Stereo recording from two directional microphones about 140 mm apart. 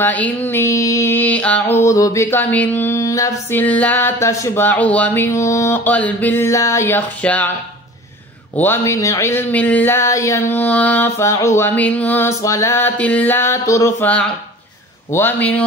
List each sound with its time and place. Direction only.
0.0 s speech: 10° left (ahead or behind)
1.9 s a sound: 25° left (ahead or behind)
2.5 s speech: 10° left (ahead or behind)
8.5 s speech: 20° left (ahead or behind)